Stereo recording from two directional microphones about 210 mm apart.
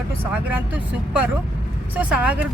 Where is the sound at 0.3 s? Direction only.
5° right (ahead or behind).